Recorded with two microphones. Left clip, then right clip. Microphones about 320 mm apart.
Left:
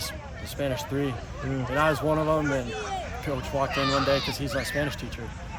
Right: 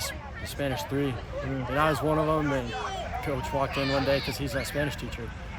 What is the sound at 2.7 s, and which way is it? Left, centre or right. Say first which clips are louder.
Speech: left 1 dB; left.